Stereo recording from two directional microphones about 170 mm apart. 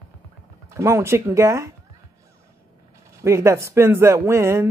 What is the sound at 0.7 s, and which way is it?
Speech, 15° right (ahead or behind).